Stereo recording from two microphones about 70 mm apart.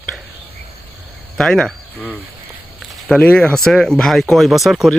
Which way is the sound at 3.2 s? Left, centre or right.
Left.